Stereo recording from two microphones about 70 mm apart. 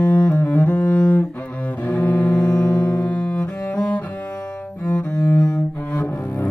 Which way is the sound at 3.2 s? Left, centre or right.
Centre.